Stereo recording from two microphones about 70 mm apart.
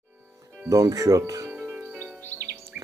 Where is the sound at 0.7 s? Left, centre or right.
Right.